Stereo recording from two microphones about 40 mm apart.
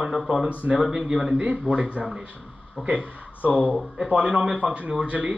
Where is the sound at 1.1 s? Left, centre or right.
Centre.